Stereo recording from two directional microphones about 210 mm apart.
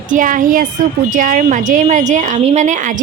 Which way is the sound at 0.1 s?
40° right (ahead or behind).